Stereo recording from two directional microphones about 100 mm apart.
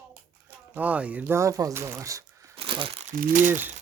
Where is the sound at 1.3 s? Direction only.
35° right (ahead or behind).